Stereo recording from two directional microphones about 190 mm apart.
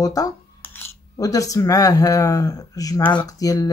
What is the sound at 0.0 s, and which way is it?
Speech, 20° left (ahead or behind).